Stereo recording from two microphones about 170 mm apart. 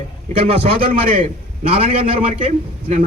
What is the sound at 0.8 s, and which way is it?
Speech, 55° right (ahead or behind).